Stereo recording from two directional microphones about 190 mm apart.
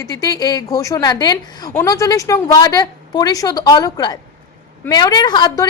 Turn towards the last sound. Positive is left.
turn(degrees=25)  # may be behind; listen again after turning